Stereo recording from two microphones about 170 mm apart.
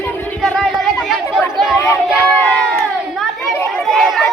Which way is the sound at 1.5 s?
Centre (ahead or behind).